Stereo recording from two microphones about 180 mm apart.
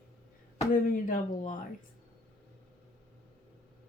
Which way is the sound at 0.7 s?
50° left (ahead or behind).